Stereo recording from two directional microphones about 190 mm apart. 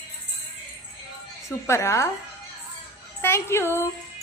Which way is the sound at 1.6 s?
15° left (ahead or behind).